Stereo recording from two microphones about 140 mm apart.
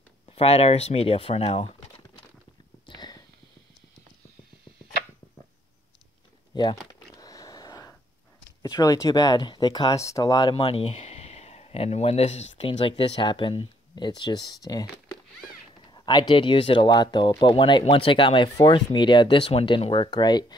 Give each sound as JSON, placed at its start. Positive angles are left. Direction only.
{"t": 0.3, "sound": "speech", "side_deg": 45}
{"t": 2.9, "sound": "a sound", "side_deg": 30}
{"t": 6.5, "sound": "speech", "side_deg": 30}
{"t": 7.2, "sound": "a sound", "side_deg": 25}
{"t": 8.6, "sound": "speech", "side_deg": 25}
{"t": 10.5, "sound": "speech", "side_deg": 40}
{"t": 15.9, "sound": "speech", "side_deg": 30}